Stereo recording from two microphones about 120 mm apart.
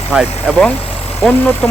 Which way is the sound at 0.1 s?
5° right (ahead or behind).